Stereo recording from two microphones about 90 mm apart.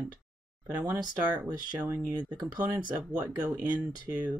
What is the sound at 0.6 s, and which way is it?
Speech, 45° right (ahead or behind).